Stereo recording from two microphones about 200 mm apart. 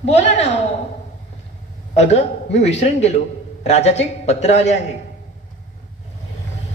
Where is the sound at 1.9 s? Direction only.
35° left (ahead or behind).